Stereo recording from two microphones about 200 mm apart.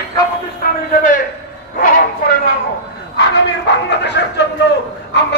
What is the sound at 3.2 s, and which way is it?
A man's voice, 60° left (ahead or behind).